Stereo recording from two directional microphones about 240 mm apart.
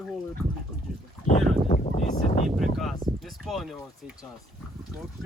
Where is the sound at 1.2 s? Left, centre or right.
Left.